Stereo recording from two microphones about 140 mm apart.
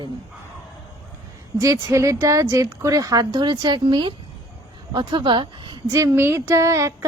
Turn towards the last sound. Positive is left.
turn(degrees=-20)  # may be behind; listen again after turning